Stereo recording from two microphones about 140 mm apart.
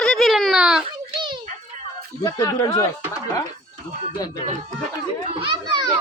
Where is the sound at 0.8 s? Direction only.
35° right (ahead or behind).